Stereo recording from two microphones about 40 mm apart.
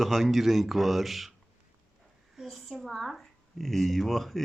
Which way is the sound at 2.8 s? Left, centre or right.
Centre.